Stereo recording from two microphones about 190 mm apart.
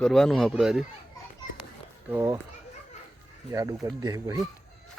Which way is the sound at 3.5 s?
15° right (ahead or behind).